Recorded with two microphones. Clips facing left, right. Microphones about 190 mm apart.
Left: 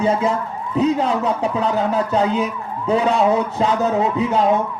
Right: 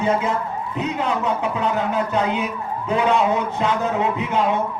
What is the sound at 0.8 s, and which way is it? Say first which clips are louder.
A man's voice: left 6 dB; 35° left (ahead or behind).